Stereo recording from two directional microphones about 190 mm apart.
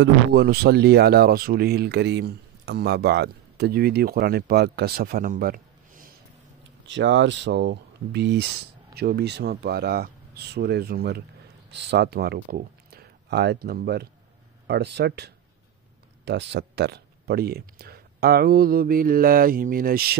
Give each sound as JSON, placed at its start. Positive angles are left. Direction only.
{"t": 0.0, "sound": "speech", "side_deg": -60}
{"t": 6.9, "sound": "speech", "side_deg": -75}